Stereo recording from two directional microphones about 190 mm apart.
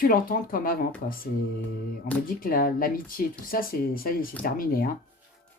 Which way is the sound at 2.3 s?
50° left (ahead or behind).